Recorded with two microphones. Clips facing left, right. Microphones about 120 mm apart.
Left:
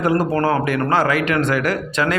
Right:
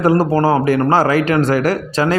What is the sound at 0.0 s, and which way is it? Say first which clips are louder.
A man's voice: right 4 dB; 35° right (ahead or behind).